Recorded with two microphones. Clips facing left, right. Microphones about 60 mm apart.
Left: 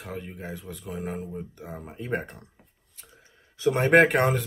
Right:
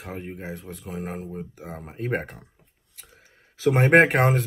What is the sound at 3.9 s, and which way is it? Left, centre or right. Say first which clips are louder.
Speech: right 1 dB; right.